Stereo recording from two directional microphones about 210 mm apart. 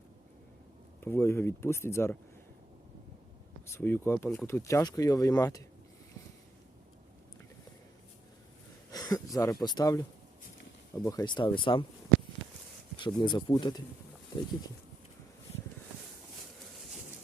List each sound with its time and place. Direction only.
1.0 s speech: 10° left (ahead or behind)
3.7 s speech: 10° left (ahead or behind)
8.9 s speech: 15° left (ahead or behind)
13.0 s speech: 20° left (ahead or behind)